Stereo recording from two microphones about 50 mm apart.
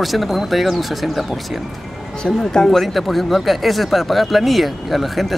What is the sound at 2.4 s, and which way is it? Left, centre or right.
Speech, centre.